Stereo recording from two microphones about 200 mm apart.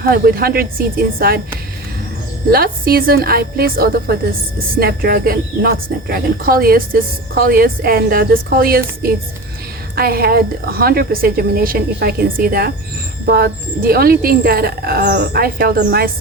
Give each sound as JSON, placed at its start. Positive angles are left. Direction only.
{"t": 0.1, "sound": "speech", "side_deg": -50}
{"t": 2.5, "sound": "speech", "side_deg": -50}